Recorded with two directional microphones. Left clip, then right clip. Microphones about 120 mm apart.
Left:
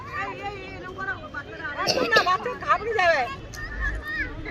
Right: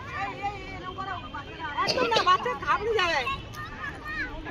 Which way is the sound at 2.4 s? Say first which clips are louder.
Left 3 dB; 30° left (ahead or behind).